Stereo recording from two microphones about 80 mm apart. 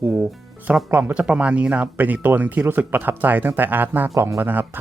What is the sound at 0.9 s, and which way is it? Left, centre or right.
Speech, right.